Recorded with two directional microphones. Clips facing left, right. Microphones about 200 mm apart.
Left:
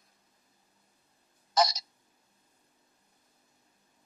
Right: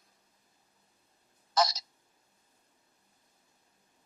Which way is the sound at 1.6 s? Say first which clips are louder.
Left 2 dB; 15° left (ahead or behind).